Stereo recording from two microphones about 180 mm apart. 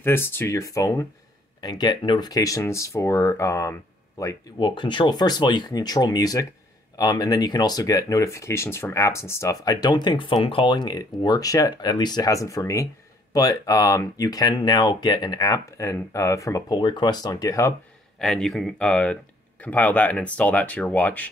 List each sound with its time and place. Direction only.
0.0 s speech: 10° left (ahead or behind)
18.2 s speech: centre (ahead or behind)